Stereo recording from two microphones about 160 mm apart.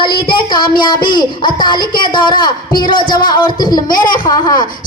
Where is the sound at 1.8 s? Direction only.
65° left (ahead or behind).